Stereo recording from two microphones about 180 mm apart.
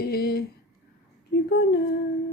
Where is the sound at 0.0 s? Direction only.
60° left (ahead or behind).